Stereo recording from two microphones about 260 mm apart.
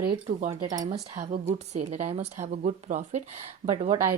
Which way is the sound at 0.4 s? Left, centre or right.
Centre.